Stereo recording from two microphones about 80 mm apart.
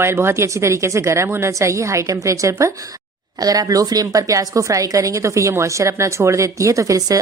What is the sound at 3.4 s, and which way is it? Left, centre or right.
A woman's voice, right.